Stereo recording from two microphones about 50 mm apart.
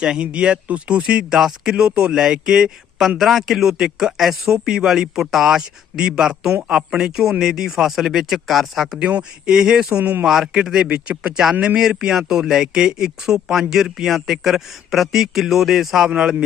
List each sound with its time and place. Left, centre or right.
0.0 s speech: centre
1.4 s speech: centre
1.7 s a man's voice: centre
9.0 s speech: right
9.5 s a man's voice: centre
10.8 s a man's voice: right; by 16.0 s centre
16.0 s speech: centre